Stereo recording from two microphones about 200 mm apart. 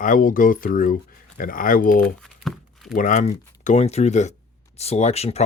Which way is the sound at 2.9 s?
40° left (ahead or behind).